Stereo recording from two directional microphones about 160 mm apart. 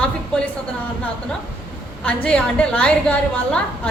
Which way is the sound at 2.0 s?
5° left (ahead or behind).